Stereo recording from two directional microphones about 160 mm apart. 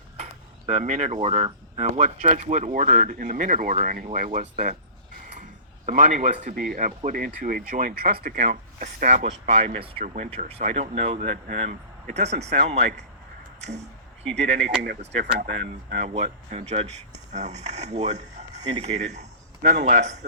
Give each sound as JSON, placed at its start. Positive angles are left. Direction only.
{"t": 0.2, "sound": "speech", "side_deg": -45}
{"t": 15.2, "sound": "speech", "side_deg": -75}
{"t": 16.5, "sound": "speech", "side_deg": -45}